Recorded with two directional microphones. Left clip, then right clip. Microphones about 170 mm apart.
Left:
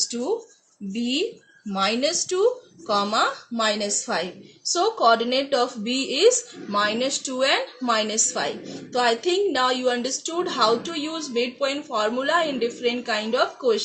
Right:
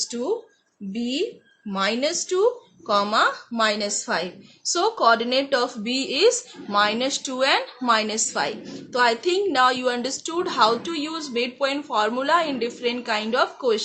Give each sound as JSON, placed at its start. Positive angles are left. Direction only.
{"t": 0.1, "sound": "speech", "side_deg": -40}
{"t": 1.7, "sound": "speech", "side_deg": -35}